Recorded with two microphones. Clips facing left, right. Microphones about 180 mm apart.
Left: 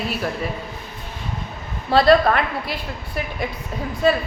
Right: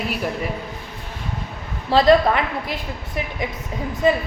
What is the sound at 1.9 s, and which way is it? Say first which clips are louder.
A woman's voice: even; 20° right (ahead or behind).